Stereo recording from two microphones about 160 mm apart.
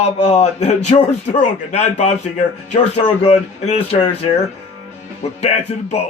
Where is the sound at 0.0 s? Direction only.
40° left (ahead or behind).